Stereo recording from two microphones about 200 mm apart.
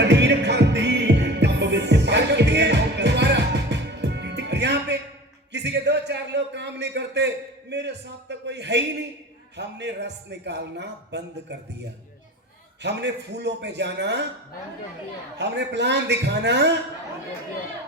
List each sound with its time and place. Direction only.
0.0 s music: 60° right (ahead or behind)
5.5 s a sound: 60° right (ahead or behind)
9.6 s a man's voice: 60° right (ahead or behind)
12.8 s a man's voice: 60° right (ahead or behind)
15.4 s a man's voice: 60° right (ahead or behind)